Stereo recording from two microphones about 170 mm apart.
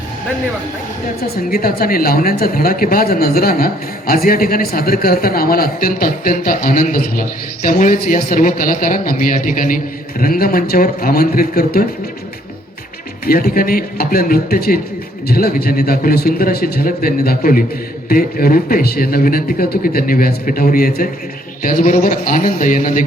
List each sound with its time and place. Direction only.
1.5 s speech: 60° left (ahead or behind)
13.2 s speech: 60° left (ahead or behind)